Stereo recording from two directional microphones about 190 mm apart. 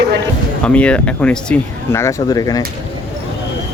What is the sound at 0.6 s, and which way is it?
Speech, 5° left (ahead or behind).